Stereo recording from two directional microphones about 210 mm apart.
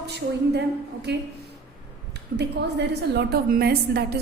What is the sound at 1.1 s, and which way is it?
Speech, 50° right (ahead or behind).